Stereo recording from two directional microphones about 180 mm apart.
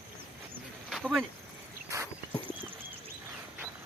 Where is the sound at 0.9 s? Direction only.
Centre (ahead or behind).